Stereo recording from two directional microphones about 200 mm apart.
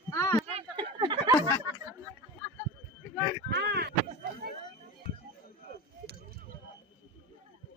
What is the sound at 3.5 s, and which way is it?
Speech, 55° right (ahead or behind).